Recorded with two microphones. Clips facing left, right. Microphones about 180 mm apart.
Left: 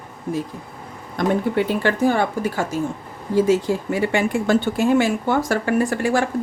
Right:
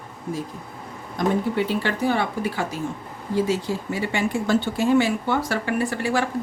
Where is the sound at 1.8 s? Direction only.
45° left (ahead or behind).